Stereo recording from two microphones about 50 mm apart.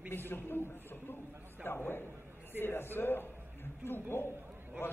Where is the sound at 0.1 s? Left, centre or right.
Left.